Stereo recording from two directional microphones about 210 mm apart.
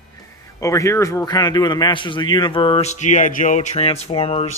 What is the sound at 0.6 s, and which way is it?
A man's voice, 15° left (ahead or behind).